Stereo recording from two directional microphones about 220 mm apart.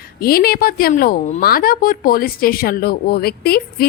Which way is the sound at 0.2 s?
45° left (ahead or behind).